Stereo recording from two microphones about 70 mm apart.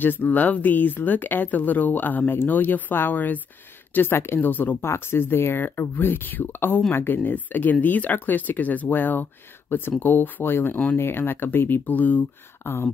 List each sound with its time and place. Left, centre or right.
0.0 s speech: left
4.8 s speech: left